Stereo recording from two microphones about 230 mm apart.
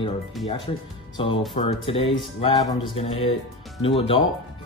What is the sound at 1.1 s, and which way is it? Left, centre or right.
Speech, left.